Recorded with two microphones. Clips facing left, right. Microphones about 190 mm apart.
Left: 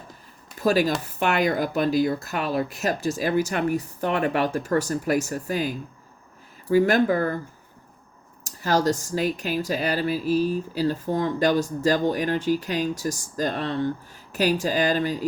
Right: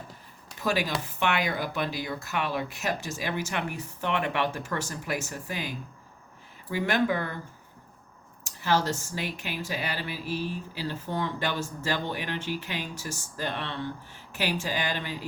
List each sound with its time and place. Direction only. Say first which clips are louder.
0.6 s speech: left 7 dB; 40° left (ahead or behind)
8.6 s speech: left 5 dB; 40° left (ahead or behind)